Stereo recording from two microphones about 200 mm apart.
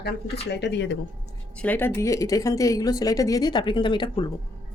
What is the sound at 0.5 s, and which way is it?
Speech, 60° left (ahead or behind).